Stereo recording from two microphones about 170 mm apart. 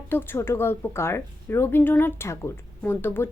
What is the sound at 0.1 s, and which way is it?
A woman's voice, 10° left (ahead or behind).